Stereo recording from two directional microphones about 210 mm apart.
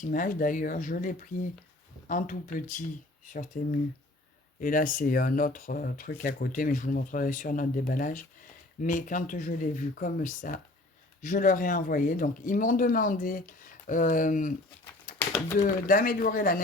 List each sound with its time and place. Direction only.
0.0 s speech: 40° left (ahead or behind)
15.1 s a sound: 40° left (ahead or behind)
15.5 s speech: 40° left (ahead or behind)